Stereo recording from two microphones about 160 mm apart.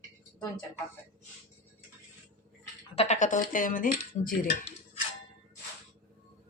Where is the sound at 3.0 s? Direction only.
45° left (ahead or behind).